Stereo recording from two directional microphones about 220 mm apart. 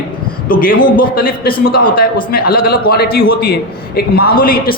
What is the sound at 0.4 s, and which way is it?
A man's voice, 40° left (ahead or behind).